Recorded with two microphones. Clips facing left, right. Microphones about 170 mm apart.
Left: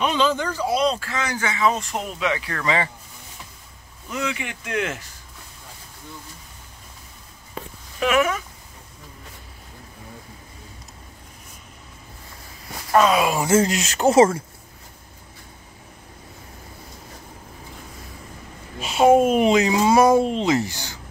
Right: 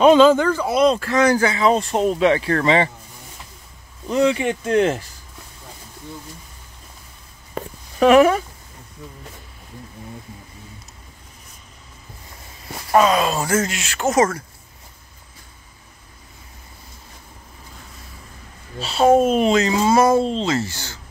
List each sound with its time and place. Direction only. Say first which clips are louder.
0.0 s speech: right 10 dB; 45° right (ahead or behind)
1.0 s speech: right 10 dB; 40° right (ahead or behind); by 2.9 s 25° right (ahead or behind)
4.1 s speech: right 11 dB; 35° right (ahead or behind)
7.5 s a sound: right 7 dB; 35° right (ahead or behind)
13.1 s speech: even; 10° left (ahead or behind)
13.5 s speech: left 3 dB; 30° left (ahead or behind)
18.8 s speech: even; 15° left (ahead or behind)